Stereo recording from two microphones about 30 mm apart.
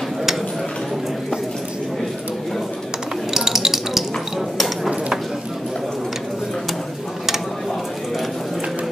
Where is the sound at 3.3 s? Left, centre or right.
Centre.